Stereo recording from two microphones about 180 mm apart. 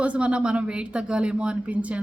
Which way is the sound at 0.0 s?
5° right (ahead or behind).